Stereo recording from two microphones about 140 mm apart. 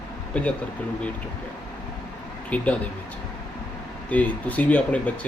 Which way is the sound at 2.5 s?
10° left (ahead or behind).